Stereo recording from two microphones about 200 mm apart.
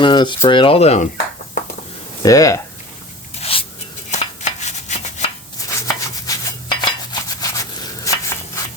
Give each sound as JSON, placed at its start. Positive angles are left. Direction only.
{"t": 0.0, "sound": "speech", "side_deg": 25}
{"t": 2.2, "sound": "speech", "side_deg": 15}
{"t": 3.4, "sound": "writing", "side_deg": 25}
{"t": 4.1, "sound": "a sound", "side_deg": 35}
{"t": 5.5, "sound": "dishes", "side_deg": 15}